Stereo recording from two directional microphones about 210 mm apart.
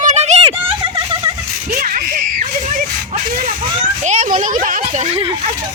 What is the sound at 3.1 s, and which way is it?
Speech, 35° right (ahead or behind).